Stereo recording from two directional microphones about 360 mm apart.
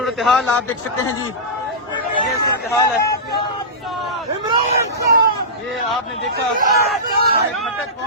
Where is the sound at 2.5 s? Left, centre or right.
Centre.